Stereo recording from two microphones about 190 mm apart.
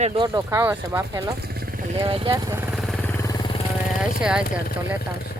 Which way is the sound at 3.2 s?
20° left (ahead or behind).